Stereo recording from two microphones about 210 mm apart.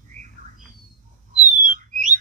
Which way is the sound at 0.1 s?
35° right (ahead or behind).